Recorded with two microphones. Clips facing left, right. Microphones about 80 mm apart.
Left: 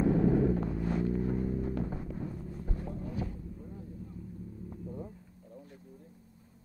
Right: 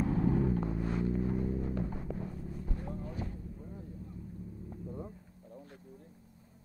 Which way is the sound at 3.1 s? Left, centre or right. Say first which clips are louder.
Left 3 dB; centre.